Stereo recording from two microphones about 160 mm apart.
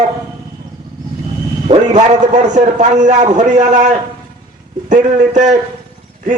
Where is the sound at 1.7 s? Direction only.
45° right (ahead or behind).